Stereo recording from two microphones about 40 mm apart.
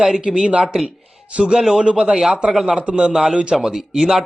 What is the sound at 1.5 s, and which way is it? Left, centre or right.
Speech, centre.